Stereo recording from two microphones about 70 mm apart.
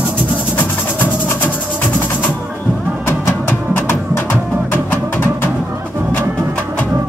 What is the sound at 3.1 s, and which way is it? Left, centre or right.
Music, left.